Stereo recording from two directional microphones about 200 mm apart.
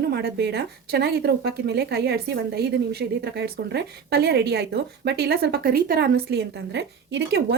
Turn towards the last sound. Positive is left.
turn(degrees=-60)  # may be behind; listen again after turning